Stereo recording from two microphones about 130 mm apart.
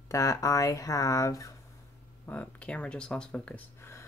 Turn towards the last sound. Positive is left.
turn(degrees=20)  # may be behind; listen again after turning